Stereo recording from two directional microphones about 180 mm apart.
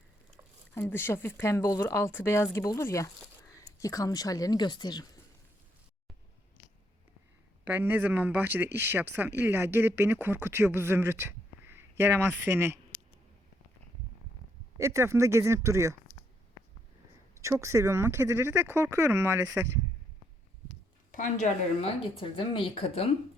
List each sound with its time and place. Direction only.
0.7 s speech: 10° left (ahead or behind)
7.6 s speech: 10° right (ahead or behind)
14.8 s speech: 15° right (ahead or behind)
17.4 s speech: 15° right (ahead or behind)
21.1 s a woman's voice: 45° left (ahead or behind)
22.2 s speech: 30° left (ahead or behind)